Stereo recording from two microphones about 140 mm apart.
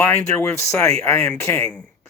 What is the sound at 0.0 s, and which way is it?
Speech, 15° left (ahead or behind).